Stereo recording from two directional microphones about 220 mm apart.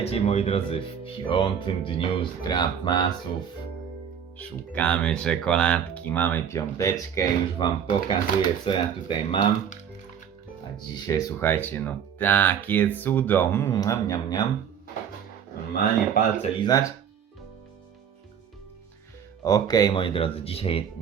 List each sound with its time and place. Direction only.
0.0 s speech: 30° left (ahead or behind)
4.4 s speech: 5° left (ahead or behind); by 9.7 s 25° left (ahead or behind)
11.0 s speech: 15° left (ahead or behind)
15.7 s speech: 40° left (ahead or behind)
16.6 s speech: 20° left (ahead or behind)
19.5 s speech: 15° left (ahead or behind)